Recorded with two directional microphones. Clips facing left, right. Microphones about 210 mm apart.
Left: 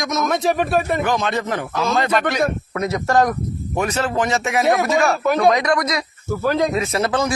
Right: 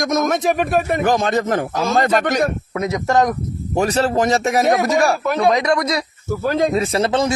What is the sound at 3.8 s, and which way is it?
Speech, 35° right (ahead or behind).